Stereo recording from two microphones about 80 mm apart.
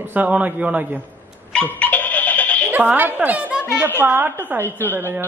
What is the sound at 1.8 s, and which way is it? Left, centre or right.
Music, centre.